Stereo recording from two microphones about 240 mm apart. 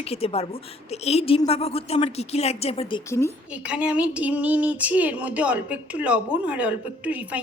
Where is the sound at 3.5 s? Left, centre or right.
Centre.